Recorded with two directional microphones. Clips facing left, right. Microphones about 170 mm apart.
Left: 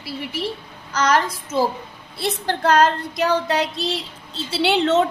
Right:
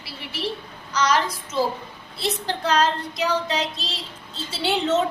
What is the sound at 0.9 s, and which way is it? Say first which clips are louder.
A woman's voice: left 2 dB; 55° left (ahead or behind).